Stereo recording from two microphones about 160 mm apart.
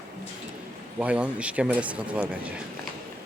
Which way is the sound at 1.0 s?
5° right (ahead or behind).